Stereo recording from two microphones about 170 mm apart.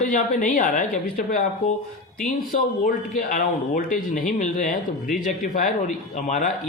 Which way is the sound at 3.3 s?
50° left (ahead or behind).